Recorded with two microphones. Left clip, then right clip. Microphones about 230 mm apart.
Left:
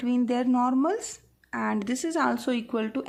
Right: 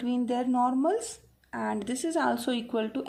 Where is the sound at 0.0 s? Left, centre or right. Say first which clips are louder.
Left 3 dB; centre.